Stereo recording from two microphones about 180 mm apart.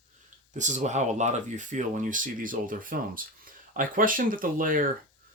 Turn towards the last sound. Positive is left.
turn(degrees=-50)  # may be behind; listen again after turning